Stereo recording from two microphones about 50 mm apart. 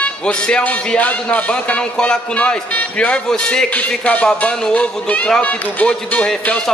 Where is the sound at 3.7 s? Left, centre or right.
Left.